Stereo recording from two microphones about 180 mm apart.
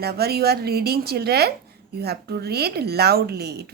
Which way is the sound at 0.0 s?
60° right (ahead or behind).